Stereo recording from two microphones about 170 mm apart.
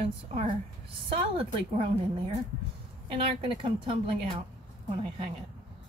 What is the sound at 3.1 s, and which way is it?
Speech, 30° right (ahead or behind).